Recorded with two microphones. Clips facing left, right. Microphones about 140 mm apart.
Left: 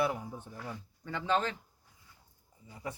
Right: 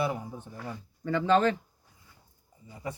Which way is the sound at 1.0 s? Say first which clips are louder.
Right 8 dB; 90° right.